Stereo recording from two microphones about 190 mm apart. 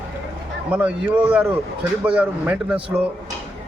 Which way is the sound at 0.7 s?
5° right (ahead or behind).